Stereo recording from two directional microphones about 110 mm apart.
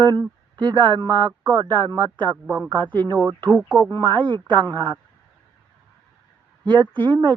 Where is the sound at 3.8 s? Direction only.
45° right (ahead or behind).